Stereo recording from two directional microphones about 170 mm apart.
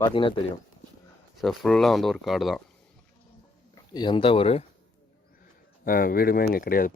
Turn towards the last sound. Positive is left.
turn(degrees=55)  # may be behind; listen again after turning